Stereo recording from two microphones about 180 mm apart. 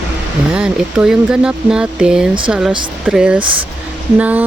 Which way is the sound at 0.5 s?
5° right (ahead or behind).